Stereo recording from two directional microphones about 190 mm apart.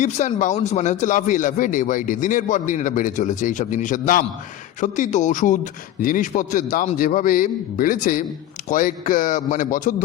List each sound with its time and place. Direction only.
0.0 s a man's voice: 40° left (ahead or behind)